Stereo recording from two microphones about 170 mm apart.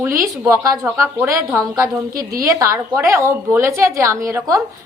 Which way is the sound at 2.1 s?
60° right (ahead or behind).